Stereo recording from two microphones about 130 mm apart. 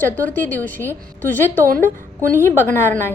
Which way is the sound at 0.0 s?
15° left (ahead or behind).